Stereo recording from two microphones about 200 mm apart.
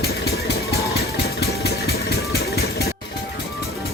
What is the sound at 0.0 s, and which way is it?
Music, 50° left (ahead or behind).